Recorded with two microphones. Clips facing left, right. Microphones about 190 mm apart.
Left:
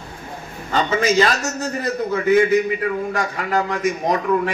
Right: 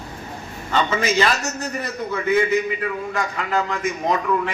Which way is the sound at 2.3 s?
45° left (ahead or behind).